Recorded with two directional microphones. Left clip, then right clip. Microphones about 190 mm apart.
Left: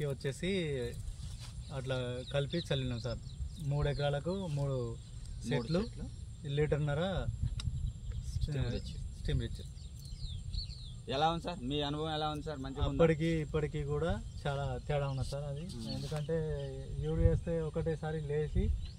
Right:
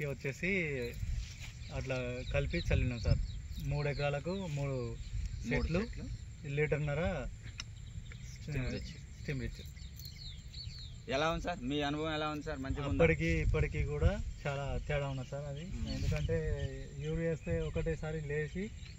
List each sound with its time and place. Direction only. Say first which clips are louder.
0.0 s speech: even; centre (ahead or behind)
8.5 s speech: even; 5° left (ahead or behind)
11.1 s speech: left 1 dB; 45° left (ahead or behind)
12.4 s a man's voice: even; 20° left (ahead or behind); by 16.5 s centre (ahead or behind)
16.5 s a man's voice: left 2 dB; 15° left (ahead or behind)
17.2 s speech: left 1 dB; centre (ahead or behind)